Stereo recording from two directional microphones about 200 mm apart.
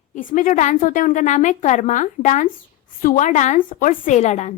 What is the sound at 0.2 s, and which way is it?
Speech, 40° left (ahead or behind).